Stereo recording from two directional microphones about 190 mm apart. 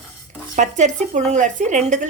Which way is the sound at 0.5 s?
40° right (ahead or behind).